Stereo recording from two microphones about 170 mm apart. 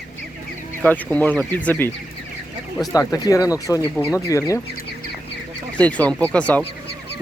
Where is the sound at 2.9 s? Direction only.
20° left (ahead or behind).